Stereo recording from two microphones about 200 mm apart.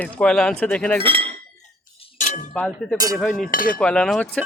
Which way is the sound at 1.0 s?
25° right (ahead or behind).